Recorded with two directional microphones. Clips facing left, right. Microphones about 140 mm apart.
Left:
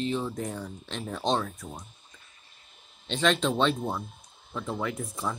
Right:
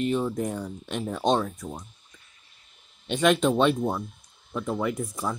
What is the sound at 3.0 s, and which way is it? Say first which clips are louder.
Speech: right 4 dB; 10° right (ahead or behind).